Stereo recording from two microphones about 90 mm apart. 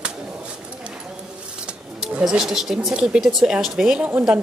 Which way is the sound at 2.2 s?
5° right (ahead or behind).